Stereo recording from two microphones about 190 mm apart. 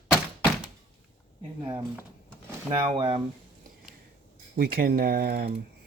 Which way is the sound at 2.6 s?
30° right (ahead or behind).